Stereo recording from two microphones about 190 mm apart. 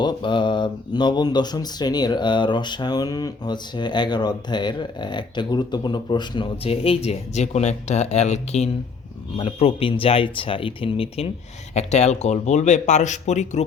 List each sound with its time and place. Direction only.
0.0 s speech: 25° left (ahead or behind)